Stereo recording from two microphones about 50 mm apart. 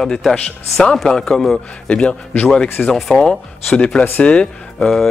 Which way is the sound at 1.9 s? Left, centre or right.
Left.